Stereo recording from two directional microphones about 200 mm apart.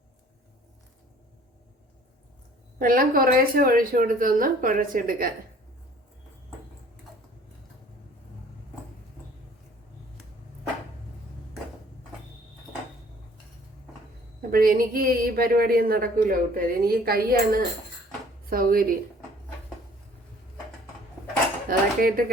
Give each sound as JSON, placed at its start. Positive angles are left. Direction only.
{"t": 2.7, "sound": "speech", "side_deg": -45}
{"t": 14.5, "sound": "speech", "side_deg": -45}
{"t": 21.7, "sound": "speech", "side_deg": -45}